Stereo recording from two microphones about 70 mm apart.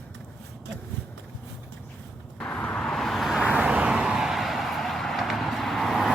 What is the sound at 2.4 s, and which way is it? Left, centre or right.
Vehicle, centre.